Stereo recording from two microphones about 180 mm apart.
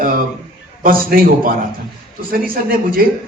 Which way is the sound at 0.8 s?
50° right (ahead or behind).